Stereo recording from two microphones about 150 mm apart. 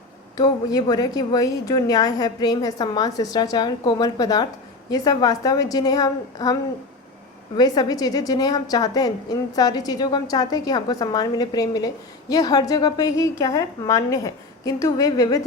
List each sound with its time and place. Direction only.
0.3 s a woman's voice: 25° left (ahead or behind)